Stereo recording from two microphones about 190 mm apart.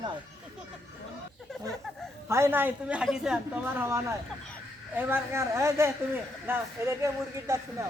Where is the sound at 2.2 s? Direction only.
15° right (ahead or behind).